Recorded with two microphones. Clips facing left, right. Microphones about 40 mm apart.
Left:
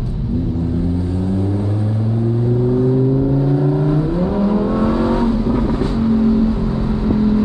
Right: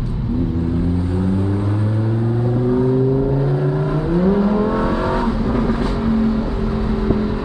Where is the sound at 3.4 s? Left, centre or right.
Right.